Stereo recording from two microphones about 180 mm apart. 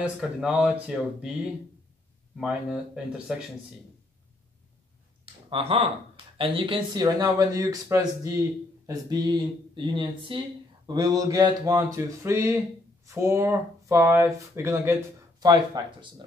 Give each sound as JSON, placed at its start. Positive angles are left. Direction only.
{"t": 0.0, "sound": "speech", "side_deg": -5}
{"t": 2.3, "sound": "speech", "side_deg": -5}
{"t": 5.2, "sound": "a sound", "side_deg": -30}
{"t": 6.3, "sound": "speech", "side_deg": -30}